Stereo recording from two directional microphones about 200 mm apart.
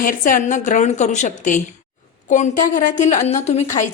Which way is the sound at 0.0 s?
40° left (ahead or behind).